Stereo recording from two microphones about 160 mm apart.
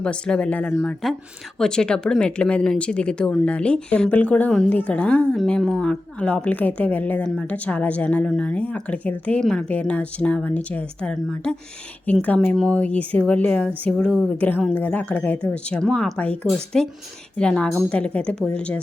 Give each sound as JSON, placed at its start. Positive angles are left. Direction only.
{"t": 0.0, "sound": "a woman's voice", "side_deg": 5}